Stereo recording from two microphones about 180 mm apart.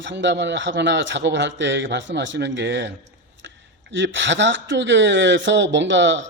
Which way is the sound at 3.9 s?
90° right.